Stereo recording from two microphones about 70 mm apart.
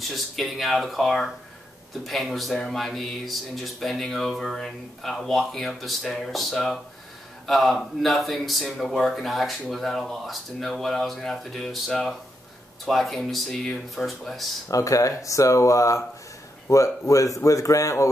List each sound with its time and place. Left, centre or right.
0.0 s speech: centre
14.7 s speech: left